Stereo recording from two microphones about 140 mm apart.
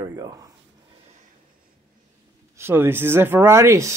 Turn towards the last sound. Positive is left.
turn(degrees=-20)  # may be behind; listen again after turning